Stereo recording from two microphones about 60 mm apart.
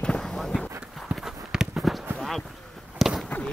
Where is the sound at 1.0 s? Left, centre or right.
Centre.